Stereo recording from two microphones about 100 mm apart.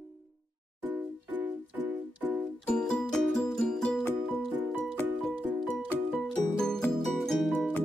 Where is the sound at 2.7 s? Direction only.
10° left (ahead or behind).